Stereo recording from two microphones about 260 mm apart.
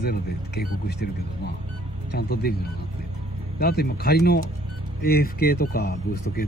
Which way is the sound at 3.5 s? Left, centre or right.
Left.